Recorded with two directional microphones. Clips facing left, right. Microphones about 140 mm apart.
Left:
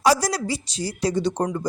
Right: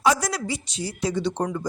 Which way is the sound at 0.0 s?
35° left (ahead or behind).